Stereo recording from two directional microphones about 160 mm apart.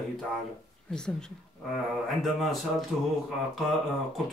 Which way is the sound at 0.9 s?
5° left (ahead or behind).